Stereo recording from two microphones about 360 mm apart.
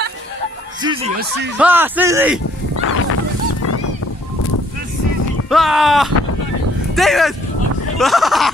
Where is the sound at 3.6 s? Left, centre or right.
Left.